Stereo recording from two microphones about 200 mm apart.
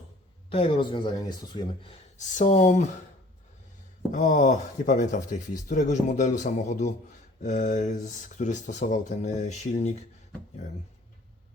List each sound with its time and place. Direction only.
0.5 s speech: 25° left (ahead or behind)
2.3 s speech: 35° left (ahead or behind)
4.1 s speech: 40° left (ahead or behind)